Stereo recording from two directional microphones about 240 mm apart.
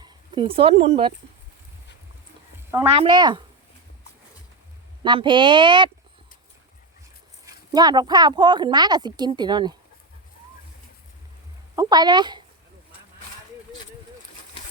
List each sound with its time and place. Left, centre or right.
0.0 s speech: right
3.0 s a woman's voice: centre
5.0 s speech: centre
7.4 s a woman's voice: centre
11.8 s a woman's voice: centre